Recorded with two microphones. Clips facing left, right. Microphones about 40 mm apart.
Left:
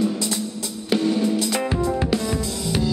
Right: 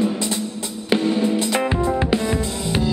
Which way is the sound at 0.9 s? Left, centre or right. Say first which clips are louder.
Right 1 dB; right.